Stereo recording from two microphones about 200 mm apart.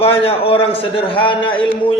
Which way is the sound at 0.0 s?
30° left (ahead or behind).